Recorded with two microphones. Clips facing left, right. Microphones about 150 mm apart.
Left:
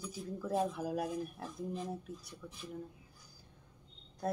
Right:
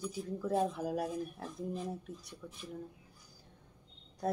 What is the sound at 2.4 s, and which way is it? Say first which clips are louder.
Speech: right 3 dB; 15° right (ahead or behind).